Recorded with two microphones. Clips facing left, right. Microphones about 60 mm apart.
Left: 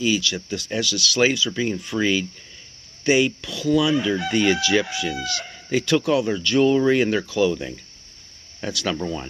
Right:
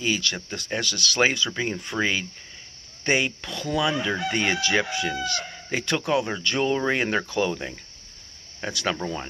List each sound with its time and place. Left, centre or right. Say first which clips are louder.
0.0 s speech: left 4 dB; right